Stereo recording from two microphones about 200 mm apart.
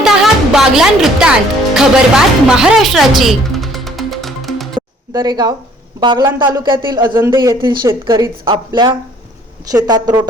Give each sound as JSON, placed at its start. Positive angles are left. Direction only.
{"t": 0.0, "sound": "music", "side_deg": 0}
{"t": 5.1, "sound": "speech", "side_deg": -20}